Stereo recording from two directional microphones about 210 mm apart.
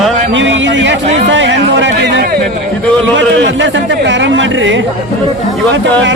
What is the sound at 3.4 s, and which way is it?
Speech, 60° right (ahead or behind).